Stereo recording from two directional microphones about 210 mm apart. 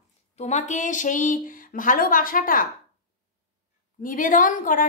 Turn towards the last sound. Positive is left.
turn(degrees=40)  # may be behind; listen again after turning